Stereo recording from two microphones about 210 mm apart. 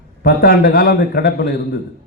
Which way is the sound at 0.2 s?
45° left (ahead or behind).